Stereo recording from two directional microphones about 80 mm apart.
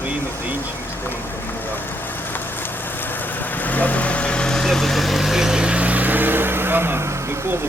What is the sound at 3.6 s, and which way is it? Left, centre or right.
Vehicle, centre.